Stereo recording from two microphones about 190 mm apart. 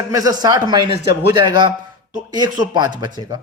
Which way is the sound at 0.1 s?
20° right (ahead or behind).